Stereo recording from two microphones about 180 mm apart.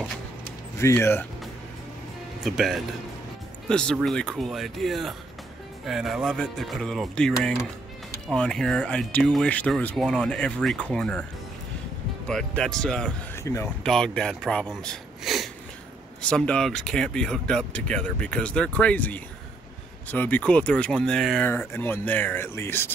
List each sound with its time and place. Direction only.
0.7 s speech: 15° left (ahead or behind)
2.4 s speech: centre (ahead or behind)
12.3 s speech: 5° left (ahead or behind)
13.4 s speech: 15° left (ahead or behind)
13.8 s speech: 5° left (ahead or behind)